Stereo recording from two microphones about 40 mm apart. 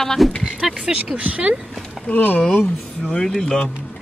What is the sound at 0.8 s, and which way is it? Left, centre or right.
Speech, right.